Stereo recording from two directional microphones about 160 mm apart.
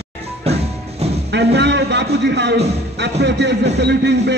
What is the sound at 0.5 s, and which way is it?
Music, 40° right (ahead or behind).